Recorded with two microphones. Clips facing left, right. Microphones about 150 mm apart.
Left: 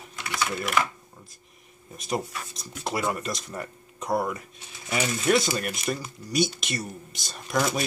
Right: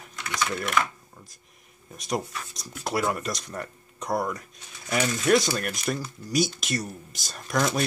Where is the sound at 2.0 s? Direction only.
Centre (ahead or behind).